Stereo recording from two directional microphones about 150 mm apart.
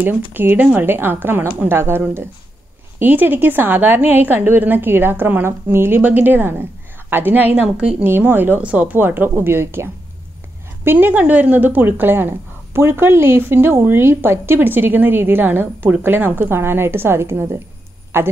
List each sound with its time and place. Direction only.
0.0 s speech: 15° right (ahead or behind)